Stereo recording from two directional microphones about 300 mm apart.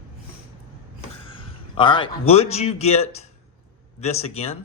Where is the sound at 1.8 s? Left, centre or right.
Centre.